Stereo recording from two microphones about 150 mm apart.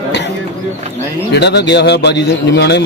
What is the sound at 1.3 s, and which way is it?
Speech, 90° left.